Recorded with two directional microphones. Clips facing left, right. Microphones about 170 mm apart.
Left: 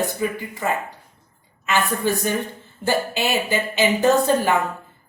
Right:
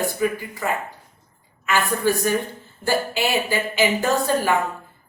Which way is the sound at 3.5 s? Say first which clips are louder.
Left 1 dB; 20° left (ahead or behind).